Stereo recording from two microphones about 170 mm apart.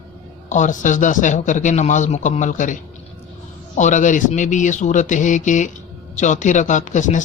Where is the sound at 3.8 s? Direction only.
45° left (ahead or behind).